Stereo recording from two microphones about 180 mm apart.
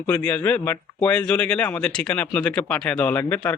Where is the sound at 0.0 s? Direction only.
10° left (ahead or behind).